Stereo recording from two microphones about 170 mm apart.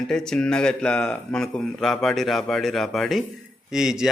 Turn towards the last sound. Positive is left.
turn(degrees=-5)  # may be behind; listen again after turning